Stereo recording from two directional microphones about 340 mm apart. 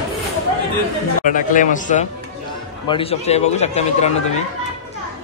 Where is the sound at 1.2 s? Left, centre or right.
Left.